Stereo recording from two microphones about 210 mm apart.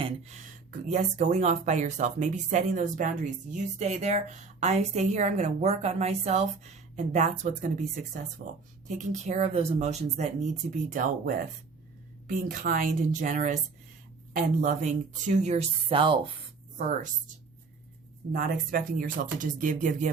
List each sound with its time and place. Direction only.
0.0 s speech: 35° right (ahead or behind)
12.3 s speech: 40° right (ahead or behind); by 16.1 s 25° right (ahead or behind)
16.7 s speech: 40° right (ahead or behind)